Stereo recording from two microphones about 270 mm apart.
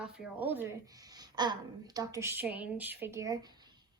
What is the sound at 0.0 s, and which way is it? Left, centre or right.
A woman's voice, centre.